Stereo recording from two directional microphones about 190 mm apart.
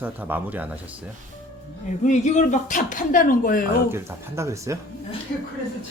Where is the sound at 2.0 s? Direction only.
40° left (ahead or behind).